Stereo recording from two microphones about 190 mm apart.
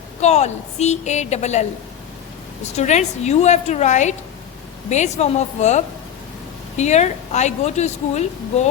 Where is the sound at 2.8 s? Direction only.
35° left (ahead or behind).